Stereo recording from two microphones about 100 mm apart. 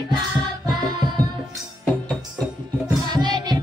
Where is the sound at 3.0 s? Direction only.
45° right (ahead or behind).